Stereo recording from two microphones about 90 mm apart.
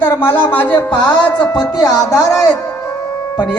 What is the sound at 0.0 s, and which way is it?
Speech, 25° left (ahead or behind).